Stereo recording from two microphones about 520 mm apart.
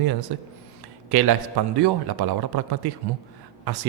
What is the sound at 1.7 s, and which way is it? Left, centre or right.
Speech, right.